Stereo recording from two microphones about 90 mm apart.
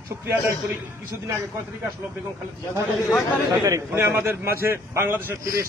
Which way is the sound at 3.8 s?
25° right (ahead or behind).